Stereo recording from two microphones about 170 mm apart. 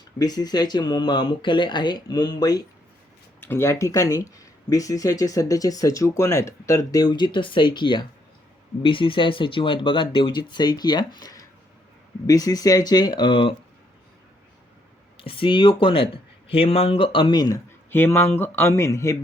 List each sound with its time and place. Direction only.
0.2 s speech: 20° left (ahead or behind)
15.2 s speech: 30° left (ahead or behind)